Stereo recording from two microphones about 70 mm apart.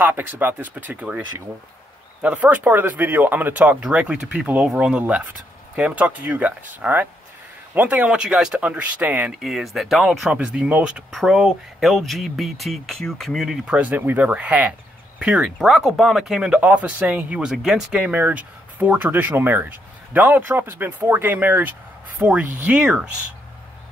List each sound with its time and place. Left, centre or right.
0.0 s speech: right
2.2 s speech: centre
8.5 s speech: right
9.4 s speech: centre
10.3 s speech: centre
11.1 s speech: centre
13.7 s speech: centre
15.7 s speech: centre
16.5 s speech: centre
17.4 s speech: centre
18.0 s speech: right